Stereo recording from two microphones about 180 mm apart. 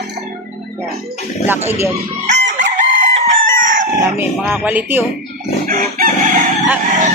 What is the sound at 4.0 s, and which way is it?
Music, 10° right (ahead or behind).